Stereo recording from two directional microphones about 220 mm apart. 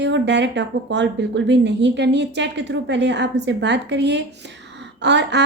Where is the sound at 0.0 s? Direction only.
50° right (ahead or behind).